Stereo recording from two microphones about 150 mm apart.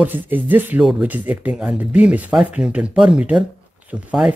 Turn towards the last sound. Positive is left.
turn(degrees=-5)  # may be behind; listen again after turning